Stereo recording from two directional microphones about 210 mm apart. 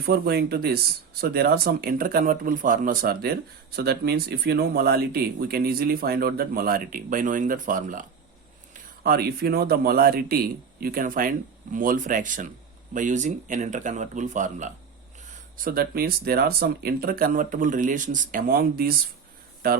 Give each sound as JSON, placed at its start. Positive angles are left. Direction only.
{"t": 0.0, "sound": "speech", "side_deg": -50}